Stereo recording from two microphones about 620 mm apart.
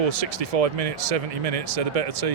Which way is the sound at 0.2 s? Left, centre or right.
Right.